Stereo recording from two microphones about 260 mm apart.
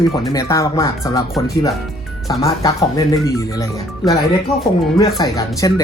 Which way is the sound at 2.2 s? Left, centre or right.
Centre.